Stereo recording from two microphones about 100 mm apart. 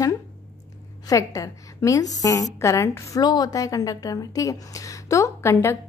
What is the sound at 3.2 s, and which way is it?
A woman's voice, 45° left (ahead or behind).